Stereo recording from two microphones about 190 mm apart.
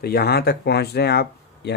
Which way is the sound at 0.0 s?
55° left (ahead or behind).